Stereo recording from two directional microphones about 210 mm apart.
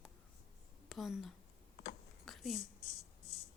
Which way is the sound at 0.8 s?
Centre (ahead or behind).